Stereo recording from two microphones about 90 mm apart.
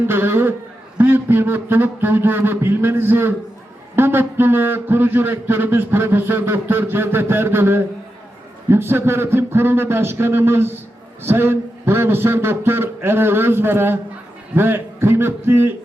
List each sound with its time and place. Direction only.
0.1 s a man's voice: 25° right (ahead or behind)